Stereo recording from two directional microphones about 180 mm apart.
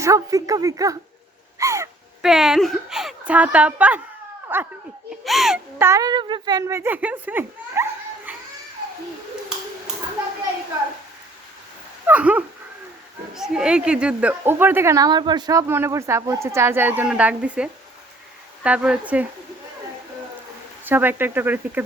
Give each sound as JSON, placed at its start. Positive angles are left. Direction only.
{"t": 0.0, "sound": "speech", "side_deg": -15}
{"t": 1.5, "sound": "gasp", "side_deg": -15}
{"t": 2.2, "sound": "a woman's voice", "side_deg": 0}
{"t": 5.8, "sound": "a woman's voice", "side_deg": -20}
{"t": 12.0, "sound": "a woman's voice", "side_deg": -10}
{"t": 20.8, "sound": "a woman's voice", "side_deg": -10}